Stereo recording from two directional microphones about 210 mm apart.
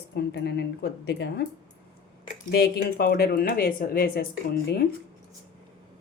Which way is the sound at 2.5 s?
50° left (ahead or behind).